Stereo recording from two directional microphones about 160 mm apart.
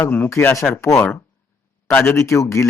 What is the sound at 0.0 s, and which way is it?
Speech, 10° left (ahead or behind).